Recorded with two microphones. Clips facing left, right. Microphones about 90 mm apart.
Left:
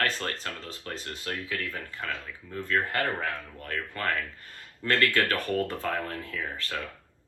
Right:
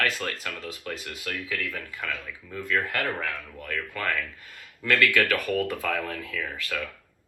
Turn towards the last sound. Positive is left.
turn(degrees=25)  # may be behind; listen again after turning